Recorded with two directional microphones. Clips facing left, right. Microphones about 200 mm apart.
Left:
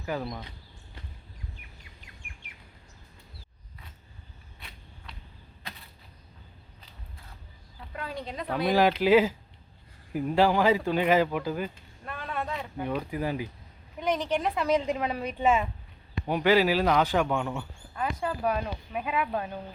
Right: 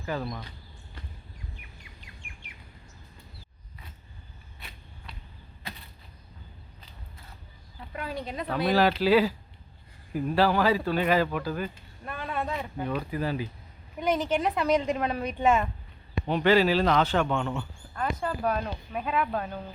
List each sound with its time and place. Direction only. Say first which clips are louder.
0.0 s speech: even; 10° left (ahead or behind)
0.3 s speech: right 1 dB; 20° left (ahead or behind)
7.9 s speech: right 2 dB; 5° right (ahead or behind)
8.6 s speech: even; 15° left (ahead or behind)
12.0 s a sound: right 2 dB; 10° right (ahead or behind)
12.8 s speech: left 1 dB; 10° left (ahead or behind)
14.0 s a woman's voice: right 2 dB; 5° right (ahead or behind); by 19.5 s 15° left (ahead or behind)